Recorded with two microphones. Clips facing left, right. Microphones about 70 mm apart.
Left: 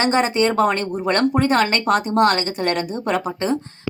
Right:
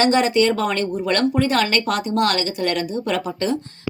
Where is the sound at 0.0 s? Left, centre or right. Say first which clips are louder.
Right 1 dB; left.